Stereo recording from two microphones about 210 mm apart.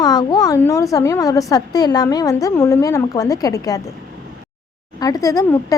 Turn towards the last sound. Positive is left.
turn(degrees=15)  # may be behind; listen again after turning